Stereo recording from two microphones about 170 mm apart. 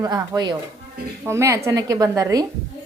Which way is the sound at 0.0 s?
25° right (ahead or behind).